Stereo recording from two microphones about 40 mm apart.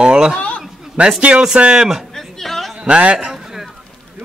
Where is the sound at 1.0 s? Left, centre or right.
Right.